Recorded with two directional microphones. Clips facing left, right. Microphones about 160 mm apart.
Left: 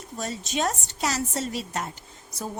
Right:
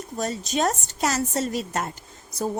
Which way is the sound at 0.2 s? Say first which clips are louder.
Right 3 dB; 45° right (ahead or behind).